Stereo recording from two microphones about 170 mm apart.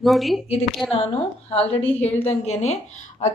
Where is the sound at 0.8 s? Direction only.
35° left (ahead or behind).